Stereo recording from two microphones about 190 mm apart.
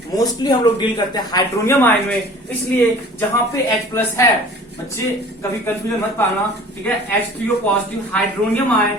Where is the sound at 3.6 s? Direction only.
15° left (ahead or behind).